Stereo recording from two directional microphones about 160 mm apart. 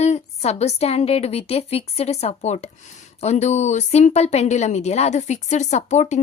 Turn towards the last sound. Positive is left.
turn(degrees=45)  # may be behind; listen again after turning